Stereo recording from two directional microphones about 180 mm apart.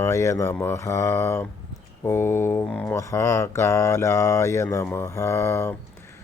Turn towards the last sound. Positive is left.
turn(degrees=15)  # may be behind; listen again after turning